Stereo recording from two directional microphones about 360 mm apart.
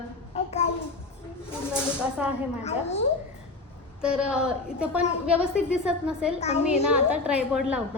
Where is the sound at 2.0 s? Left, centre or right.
Centre.